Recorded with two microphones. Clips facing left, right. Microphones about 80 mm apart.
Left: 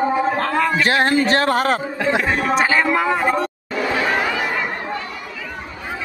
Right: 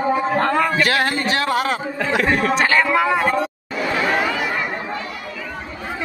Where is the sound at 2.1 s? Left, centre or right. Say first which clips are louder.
Right 1 dB; left.